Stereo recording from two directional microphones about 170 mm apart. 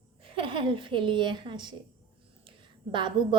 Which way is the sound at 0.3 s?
30° right (ahead or behind).